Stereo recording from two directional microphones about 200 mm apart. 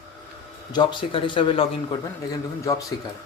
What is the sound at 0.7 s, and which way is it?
A man's voice, 25° left (ahead or behind).